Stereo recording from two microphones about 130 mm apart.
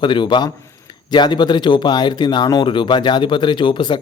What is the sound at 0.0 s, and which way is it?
Speech, 35° left (ahead or behind).